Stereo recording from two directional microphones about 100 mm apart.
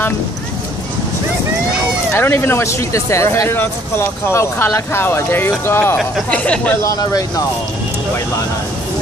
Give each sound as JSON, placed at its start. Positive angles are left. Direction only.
{"t": 2.1, "sound": "speech", "side_deg": 20}
{"t": 6.3, "sound": "speech", "side_deg": 10}
{"t": 6.8, "sound": "speech", "side_deg": 35}